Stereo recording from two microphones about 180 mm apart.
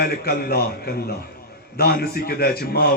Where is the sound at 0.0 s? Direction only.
60° left (ahead or behind).